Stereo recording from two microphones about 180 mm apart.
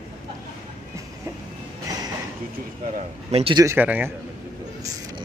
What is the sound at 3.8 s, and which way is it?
Speech, 10° right (ahead or behind).